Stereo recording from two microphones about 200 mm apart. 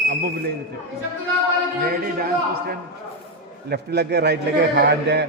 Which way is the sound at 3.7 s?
55° right (ahead or behind).